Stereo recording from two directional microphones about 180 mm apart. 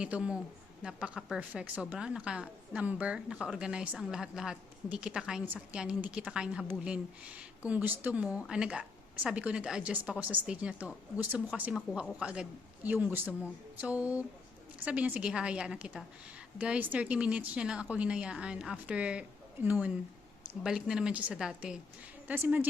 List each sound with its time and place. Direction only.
0.0 s a woman's voice: 5° right (ahead or behind)